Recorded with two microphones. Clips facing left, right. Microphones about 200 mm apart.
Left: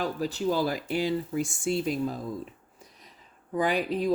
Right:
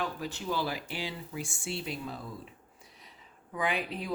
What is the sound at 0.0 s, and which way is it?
Speech, 35° left (ahead or behind).